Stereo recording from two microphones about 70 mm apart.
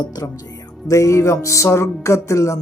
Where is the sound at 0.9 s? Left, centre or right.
Left.